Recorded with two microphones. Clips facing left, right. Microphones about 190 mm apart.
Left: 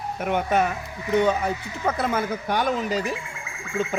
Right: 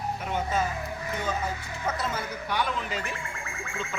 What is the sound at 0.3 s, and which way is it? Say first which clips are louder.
A man's voice: left 7 dB; 65° left (ahead or behind).